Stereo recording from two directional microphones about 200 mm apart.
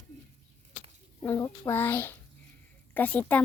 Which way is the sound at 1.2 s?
10° left (ahead or behind).